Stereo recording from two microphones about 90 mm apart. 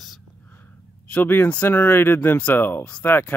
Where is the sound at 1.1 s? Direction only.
20° left (ahead or behind).